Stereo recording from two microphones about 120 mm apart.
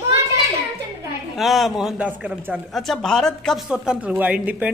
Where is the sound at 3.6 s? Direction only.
5° right (ahead or behind).